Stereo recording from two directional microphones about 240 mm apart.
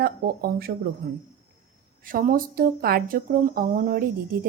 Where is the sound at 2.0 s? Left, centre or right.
Right.